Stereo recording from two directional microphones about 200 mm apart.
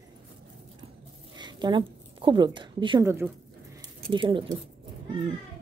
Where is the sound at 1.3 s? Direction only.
20° right (ahead or behind).